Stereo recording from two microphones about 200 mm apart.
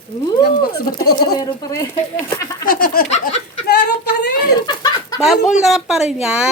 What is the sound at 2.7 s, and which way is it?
Speech, 45° left (ahead or behind).